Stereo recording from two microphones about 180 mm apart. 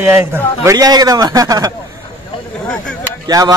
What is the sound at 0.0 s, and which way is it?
Speech, 10° right (ahead or behind).